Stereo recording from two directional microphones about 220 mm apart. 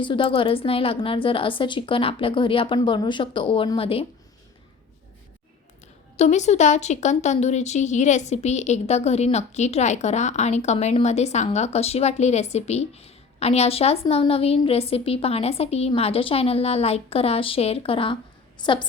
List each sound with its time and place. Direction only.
0.0 s speech: 20° left (ahead or behind)
6.1 s speech: 30° left (ahead or behind)